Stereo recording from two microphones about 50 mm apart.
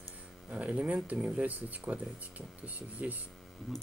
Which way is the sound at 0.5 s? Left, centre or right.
Right.